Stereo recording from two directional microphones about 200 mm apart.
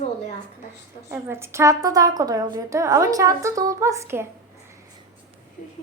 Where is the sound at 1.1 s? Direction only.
15° right (ahead or behind).